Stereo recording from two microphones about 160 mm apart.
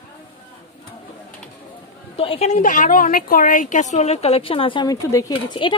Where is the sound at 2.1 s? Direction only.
35° left (ahead or behind).